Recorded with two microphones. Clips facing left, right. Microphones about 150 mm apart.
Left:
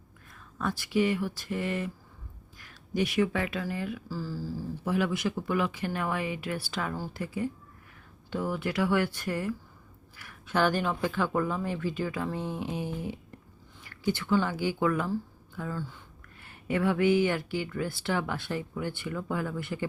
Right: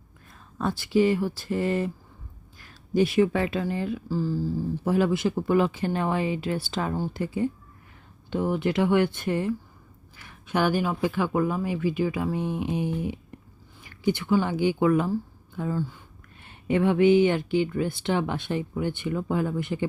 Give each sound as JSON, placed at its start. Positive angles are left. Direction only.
{"t": 0.6, "sound": "a woman's voice", "side_deg": -30}